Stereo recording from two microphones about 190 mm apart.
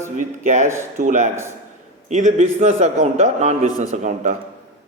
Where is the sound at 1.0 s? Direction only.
40° right (ahead or behind).